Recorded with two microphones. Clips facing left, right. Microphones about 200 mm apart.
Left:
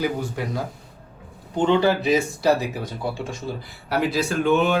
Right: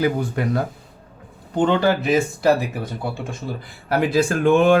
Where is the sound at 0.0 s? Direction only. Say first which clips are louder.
Right 4 dB; 60° right (ahead or behind).